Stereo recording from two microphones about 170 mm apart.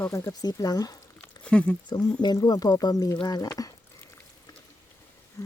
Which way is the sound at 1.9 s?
25° left (ahead or behind).